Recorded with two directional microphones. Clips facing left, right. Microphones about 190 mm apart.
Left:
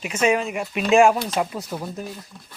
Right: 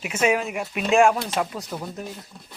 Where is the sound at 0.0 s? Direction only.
5° right (ahead or behind).